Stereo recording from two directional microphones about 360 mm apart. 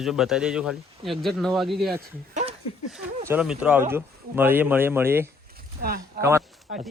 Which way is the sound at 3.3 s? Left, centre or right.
Centre.